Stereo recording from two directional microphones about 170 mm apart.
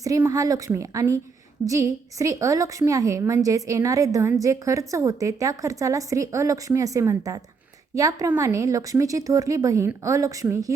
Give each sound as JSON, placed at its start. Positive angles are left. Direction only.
{"t": 0.0, "sound": "a woman's voice", "side_deg": -20}